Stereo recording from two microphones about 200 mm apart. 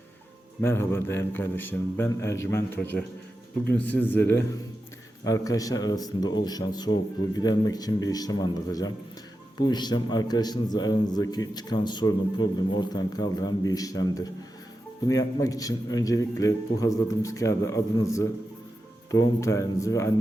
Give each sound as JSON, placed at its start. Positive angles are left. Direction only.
{"t": 0.6, "sound": "a man's voice", "side_deg": 10}